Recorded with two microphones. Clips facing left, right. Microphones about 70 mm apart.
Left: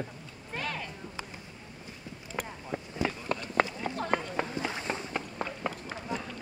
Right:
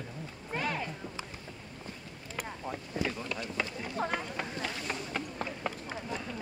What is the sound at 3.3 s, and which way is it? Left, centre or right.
Run, left.